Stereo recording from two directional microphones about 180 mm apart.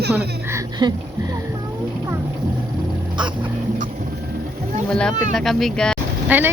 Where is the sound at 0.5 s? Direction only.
25° right (ahead or behind).